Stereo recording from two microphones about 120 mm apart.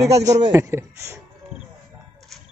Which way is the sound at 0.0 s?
30° right (ahead or behind).